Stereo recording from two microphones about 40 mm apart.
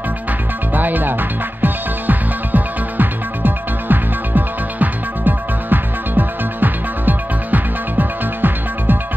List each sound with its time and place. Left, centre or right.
0.7 s music: right